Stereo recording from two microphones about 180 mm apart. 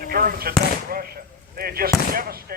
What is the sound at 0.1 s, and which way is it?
Speech, 55° right (ahead or behind).